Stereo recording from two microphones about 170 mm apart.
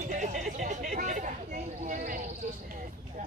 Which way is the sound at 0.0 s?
45° right (ahead or behind).